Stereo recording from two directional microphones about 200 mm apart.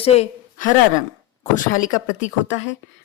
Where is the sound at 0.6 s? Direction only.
40° left (ahead or behind).